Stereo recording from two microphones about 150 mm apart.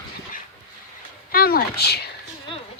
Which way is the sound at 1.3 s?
90° left.